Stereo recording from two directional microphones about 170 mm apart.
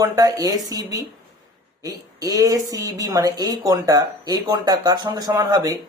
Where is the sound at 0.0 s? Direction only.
20° right (ahead or behind).